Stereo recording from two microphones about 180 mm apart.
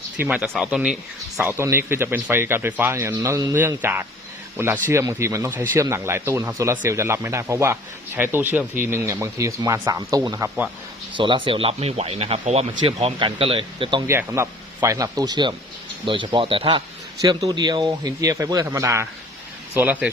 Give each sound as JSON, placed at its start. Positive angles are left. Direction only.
{"t": 0.2, "sound": "speech", "side_deg": -5}
{"t": 14.1, "sound": "a man's voice", "side_deg": -15}